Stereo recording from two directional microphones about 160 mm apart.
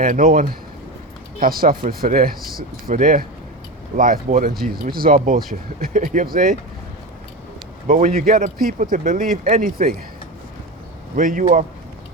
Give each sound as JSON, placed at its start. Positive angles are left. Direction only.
{"t": 0.0, "sound": "speech", "side_deg": -60}
{"t": 4.7, "sound": "speech", "side_deg": -65}
{"t": 7.9, "sound": "speech", "side_deg": -55}
{"t": 11.2, "sound": "speech", "side_deg": -55}